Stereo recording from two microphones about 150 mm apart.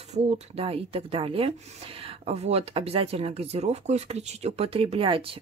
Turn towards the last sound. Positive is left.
turn(degrees=-40)  # may be behind; listen again after turning